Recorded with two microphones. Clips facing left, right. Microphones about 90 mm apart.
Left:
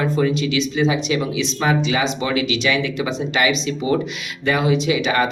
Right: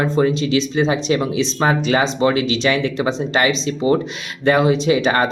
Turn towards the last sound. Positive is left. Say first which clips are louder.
# right 3 dB
turn(degrees=-40)  # may be behind; listen again after turning